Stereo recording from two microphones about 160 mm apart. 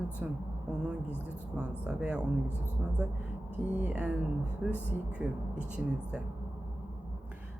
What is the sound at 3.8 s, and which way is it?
Speech, 10° right (ahead or behind).